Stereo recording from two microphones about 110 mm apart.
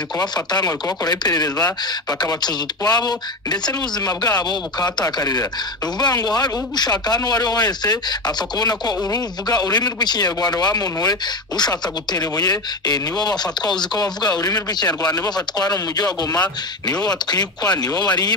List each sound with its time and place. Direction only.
0.2 s speech: 40° left (ahead or behind)